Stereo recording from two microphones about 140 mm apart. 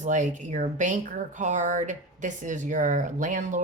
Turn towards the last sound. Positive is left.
turn(degrees=-65)  # may be behind; listen again after turning